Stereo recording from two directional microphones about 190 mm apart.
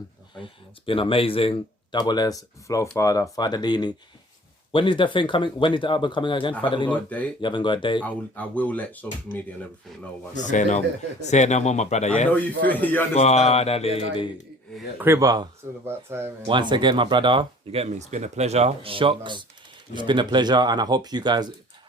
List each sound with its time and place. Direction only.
0.3 s speech: 25° left (ahead or behind)
8.0 s speech: 10° left (ahead or behind)
10.3 s speech: 40° left (ahead or behind)
12.6 s speech: 10° left (ahead or behind)
13.1 s speech: 35° left (ahead or behind)
14.9 s speech: 15° right (ahead or behind)
16.5 s speech: 25° right (ahead or behind)